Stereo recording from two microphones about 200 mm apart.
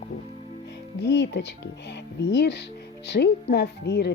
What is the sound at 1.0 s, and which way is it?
Speech, 60° left (ahead or behind).